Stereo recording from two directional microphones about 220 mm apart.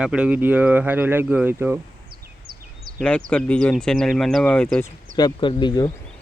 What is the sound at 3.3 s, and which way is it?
Speech, 5° left (ahead or behind).